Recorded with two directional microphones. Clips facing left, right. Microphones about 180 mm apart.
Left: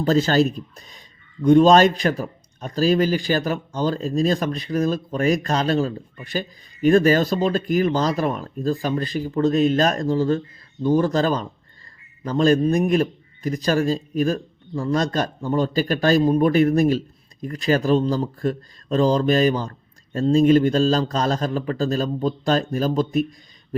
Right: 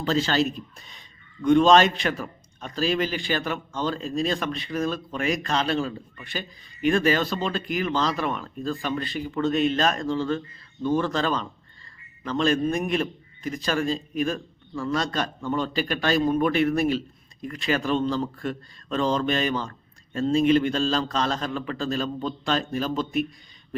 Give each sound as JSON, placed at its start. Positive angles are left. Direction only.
{"t": 0.0, "sound": "a man's voice", "side_deg": 45}